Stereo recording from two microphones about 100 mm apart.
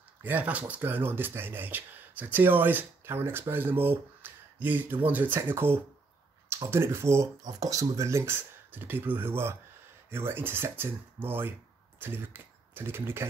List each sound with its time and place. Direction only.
0.2 s speech: 15° right (ahead or behind)
7.4 s speech: 40° right (ahead or behind)